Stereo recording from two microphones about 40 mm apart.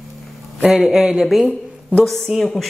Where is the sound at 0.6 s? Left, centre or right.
Centre.